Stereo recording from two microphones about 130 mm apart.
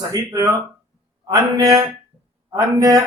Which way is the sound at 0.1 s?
25° right (ahead or behind).